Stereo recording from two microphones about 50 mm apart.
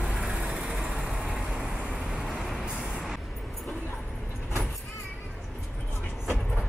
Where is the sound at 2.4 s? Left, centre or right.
Centre.